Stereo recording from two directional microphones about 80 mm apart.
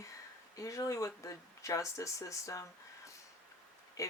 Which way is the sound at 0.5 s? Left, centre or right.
Left.